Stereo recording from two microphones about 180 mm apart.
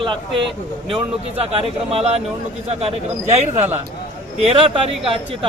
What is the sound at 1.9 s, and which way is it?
Speech, 35° right (ahead or behind).